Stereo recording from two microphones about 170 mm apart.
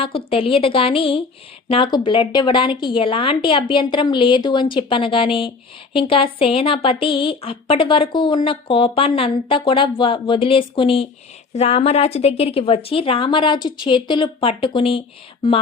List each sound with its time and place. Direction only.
0.0 s a woman's voice: 35° left (ahead or behind)